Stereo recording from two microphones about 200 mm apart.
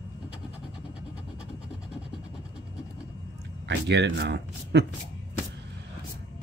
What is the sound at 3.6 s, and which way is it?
Speech, 60° right (ahead or behind).